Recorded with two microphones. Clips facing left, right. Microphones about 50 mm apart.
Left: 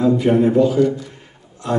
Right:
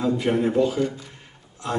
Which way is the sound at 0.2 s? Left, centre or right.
Centre.